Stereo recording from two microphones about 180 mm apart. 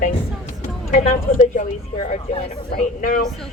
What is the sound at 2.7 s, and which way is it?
Speech, 45° left (ahead or behind).